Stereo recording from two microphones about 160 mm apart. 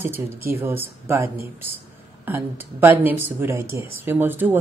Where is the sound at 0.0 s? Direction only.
15° right (ahead or behind).